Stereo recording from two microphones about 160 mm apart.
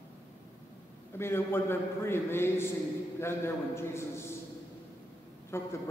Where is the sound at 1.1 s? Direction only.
15° left (ahead or behind).